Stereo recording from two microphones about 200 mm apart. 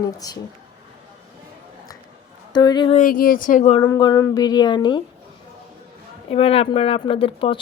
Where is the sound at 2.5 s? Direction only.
20° left (ahead or behind).